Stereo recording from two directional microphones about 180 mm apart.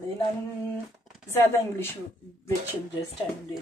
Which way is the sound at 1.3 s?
15° left (ahead or behind).